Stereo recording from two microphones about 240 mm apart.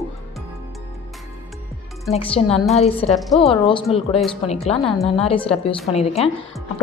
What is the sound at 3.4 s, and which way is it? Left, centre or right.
Speech, left.